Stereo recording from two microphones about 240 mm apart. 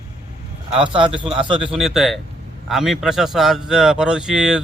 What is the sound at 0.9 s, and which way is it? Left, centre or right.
Speech, right.